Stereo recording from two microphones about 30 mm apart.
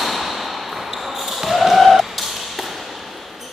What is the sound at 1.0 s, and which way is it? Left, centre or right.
Basketball bounce, centre.